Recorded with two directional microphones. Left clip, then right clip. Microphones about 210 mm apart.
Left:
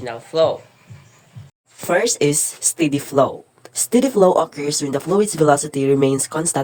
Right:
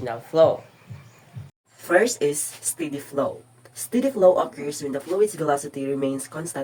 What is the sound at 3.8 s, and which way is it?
Speech, 50° left (ahead or behind).